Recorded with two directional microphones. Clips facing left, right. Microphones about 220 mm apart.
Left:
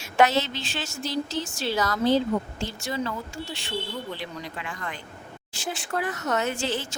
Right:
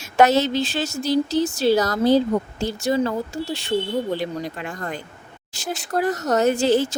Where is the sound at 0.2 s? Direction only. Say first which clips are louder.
Right 5 dB; 40° right (ahead or behind).